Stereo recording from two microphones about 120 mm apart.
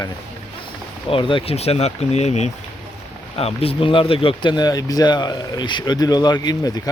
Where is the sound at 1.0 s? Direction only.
50° left (ahead or behind); by 2.5 s 65° left (ahead or behind).